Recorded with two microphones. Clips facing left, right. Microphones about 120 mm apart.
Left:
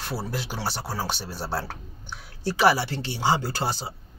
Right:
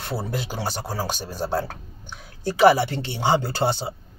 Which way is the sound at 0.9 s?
45° right (ahead or behind).